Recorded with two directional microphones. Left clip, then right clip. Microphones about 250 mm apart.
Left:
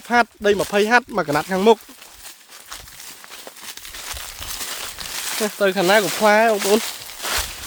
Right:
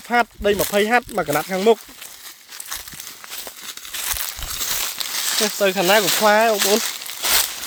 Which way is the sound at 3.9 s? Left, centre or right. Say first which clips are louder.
Right 7 dB; right.